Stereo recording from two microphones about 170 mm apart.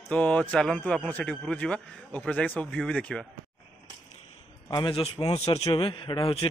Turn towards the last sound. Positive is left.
turn(degrees=30)  # may be behind; listen again after turning